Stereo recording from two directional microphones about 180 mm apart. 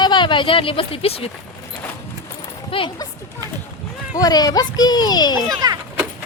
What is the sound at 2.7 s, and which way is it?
Speech, 25° left (ahead or behind).